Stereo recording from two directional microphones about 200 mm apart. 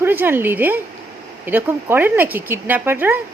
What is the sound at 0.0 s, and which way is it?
Speech, 10° right (ahead or behind).